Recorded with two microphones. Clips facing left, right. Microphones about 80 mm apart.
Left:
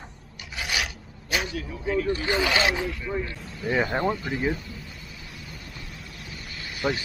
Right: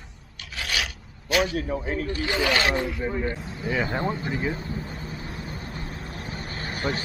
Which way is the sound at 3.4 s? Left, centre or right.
Right.